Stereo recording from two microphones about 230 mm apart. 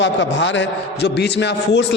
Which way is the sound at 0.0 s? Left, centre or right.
Left.